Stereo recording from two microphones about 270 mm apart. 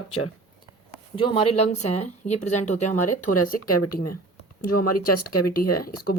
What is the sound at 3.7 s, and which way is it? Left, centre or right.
Speech, left.